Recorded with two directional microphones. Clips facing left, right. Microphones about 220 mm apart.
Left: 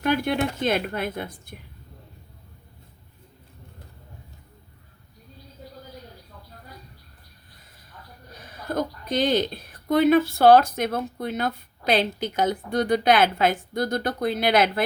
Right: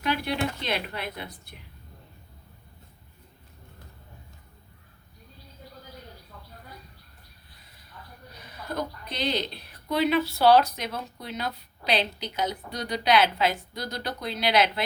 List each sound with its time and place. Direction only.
0.0 s speech: 50° left (ahead or behind)
8.4 s speech: 50° left (ahead or behind)